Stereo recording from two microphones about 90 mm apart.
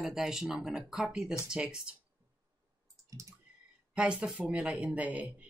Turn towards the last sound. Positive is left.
turn(degrees=-15)  # may be behind; listen again after turning